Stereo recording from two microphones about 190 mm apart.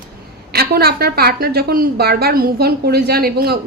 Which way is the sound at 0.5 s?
55° right (ahead or behind).